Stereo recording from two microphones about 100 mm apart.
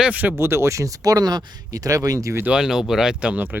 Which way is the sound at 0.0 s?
15° right (ahead or behind).